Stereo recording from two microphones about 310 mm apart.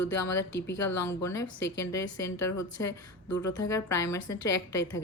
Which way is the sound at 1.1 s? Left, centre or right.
Centre.